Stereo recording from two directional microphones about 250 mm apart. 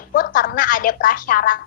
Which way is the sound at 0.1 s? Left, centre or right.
Left.